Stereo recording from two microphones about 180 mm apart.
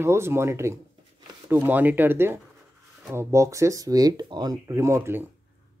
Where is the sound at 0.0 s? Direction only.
15° right (ahead or behind).